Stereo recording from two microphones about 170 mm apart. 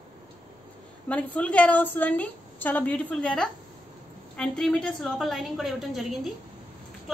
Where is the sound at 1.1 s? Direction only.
5° left (ahead or behind).